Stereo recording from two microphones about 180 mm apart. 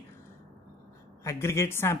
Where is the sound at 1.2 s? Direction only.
15° left (ahead or behind).